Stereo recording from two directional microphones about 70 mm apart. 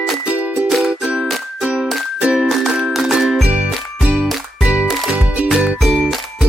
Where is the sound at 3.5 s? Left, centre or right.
Centre.